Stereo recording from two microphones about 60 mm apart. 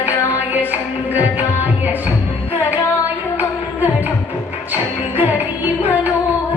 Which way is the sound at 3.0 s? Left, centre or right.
Right.